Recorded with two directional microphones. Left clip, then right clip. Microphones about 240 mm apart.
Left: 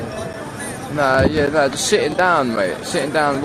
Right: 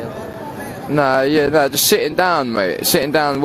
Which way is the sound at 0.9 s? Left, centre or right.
Right.